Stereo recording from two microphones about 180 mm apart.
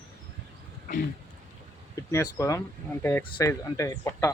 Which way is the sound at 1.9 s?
15° left (ahead or behind).